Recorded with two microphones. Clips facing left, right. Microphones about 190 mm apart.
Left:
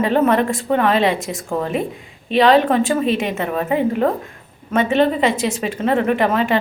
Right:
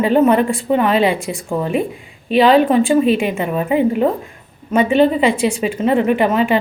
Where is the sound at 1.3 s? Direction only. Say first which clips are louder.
Right 2 dB; 40° left (ahead or behind).